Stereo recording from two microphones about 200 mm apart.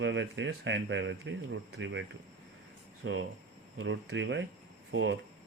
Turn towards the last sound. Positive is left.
turn(degrees=-65)  # may be behind; listen again after turning